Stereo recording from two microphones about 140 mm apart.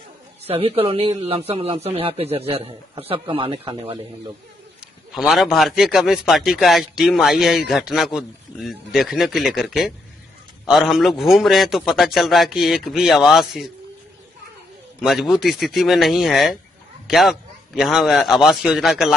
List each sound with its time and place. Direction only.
0.4 s speech: 45° right (ahead or behind)
5.1 s speech: centre (ahead or behind)
15.0 s speech: centre (ahead or behind)